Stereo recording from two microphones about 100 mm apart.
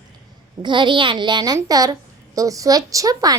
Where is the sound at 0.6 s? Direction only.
50° right (ahead or behind).